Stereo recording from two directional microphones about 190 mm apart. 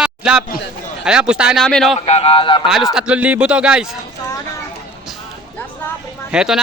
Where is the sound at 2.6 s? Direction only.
Centre (ahead or behind).